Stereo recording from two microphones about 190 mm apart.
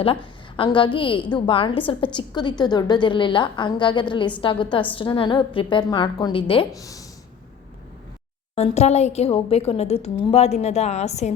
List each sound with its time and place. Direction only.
0.0 s a woman's voice: 30° left (ahead or behind)
8.5 s a woman's voice: 35° left (ahead or behind)